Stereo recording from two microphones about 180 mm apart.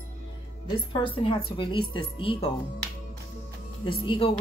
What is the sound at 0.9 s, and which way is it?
Speech, 30° left (ahead or behind).